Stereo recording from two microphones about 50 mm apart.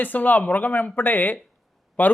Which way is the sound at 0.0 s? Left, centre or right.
Left.